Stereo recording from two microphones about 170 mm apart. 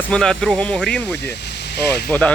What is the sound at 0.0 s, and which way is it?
Speech, 5° left (ahead or behind).